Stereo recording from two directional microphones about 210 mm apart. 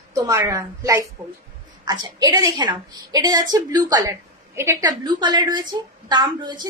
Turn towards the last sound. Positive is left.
turn(degrees=-20)  # may be behind; listen again after turning